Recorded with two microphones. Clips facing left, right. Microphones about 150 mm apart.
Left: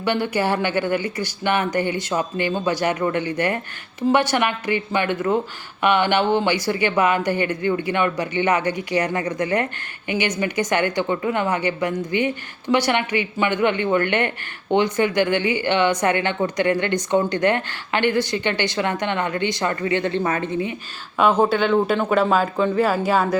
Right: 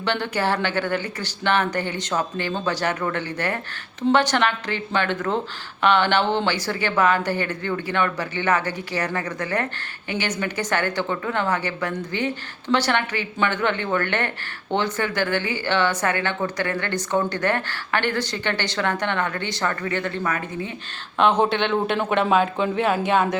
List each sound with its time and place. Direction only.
0.0 s a woman's voice: 10° left (ahead or behind)
21.2 s speech: centre (ahead or behind)